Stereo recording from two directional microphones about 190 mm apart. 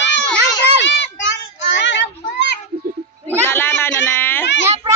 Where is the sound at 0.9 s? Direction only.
70° left (ahead or behind).